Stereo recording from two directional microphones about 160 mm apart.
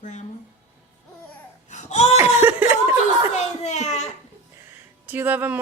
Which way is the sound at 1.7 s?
45° left (ahead or behind).